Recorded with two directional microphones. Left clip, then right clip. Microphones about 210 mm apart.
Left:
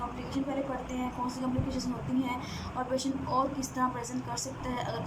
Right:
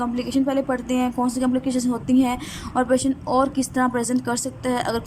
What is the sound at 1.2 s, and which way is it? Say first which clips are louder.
A woman's voice: right 11 dB; 50° right (ahead or behind).